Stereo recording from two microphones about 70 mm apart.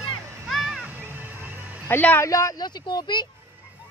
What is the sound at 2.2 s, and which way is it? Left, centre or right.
Speech, left.